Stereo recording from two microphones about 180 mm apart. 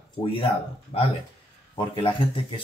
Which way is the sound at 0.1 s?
30° left (ahead or behind).